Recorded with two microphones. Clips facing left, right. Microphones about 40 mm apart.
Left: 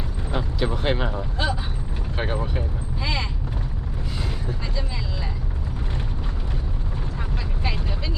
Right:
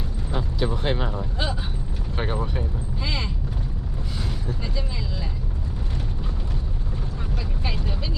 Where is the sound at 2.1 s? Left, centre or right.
Centre.